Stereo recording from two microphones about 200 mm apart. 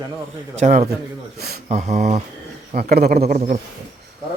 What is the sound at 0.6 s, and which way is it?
Speech, 35° right (ahead or behind).